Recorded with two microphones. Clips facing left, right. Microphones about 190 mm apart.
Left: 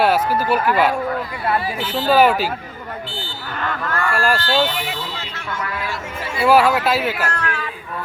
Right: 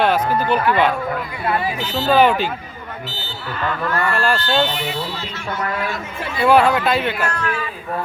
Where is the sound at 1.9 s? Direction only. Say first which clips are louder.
Even; 5° left (ahead or behind).